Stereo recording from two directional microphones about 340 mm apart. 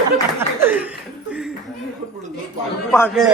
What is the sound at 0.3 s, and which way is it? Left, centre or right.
Chuckle, centre.